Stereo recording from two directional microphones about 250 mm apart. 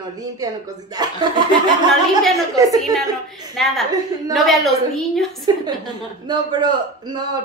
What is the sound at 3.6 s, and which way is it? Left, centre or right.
A woman's voice, centre.